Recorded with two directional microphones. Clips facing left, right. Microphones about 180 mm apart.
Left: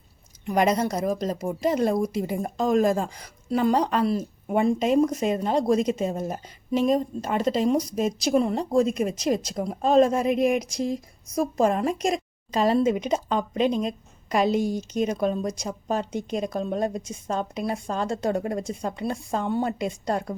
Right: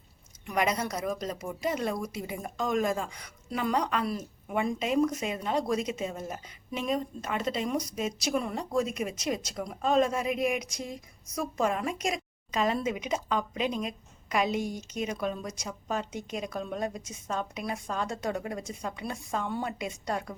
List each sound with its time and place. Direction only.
0.4 s speech: 35° left (ahead or behind)